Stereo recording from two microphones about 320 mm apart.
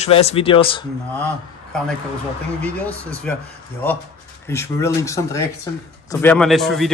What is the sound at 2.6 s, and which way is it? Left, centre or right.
Speech, centre.